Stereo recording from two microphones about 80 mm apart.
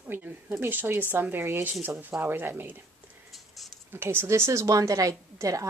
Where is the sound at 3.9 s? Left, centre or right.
Right.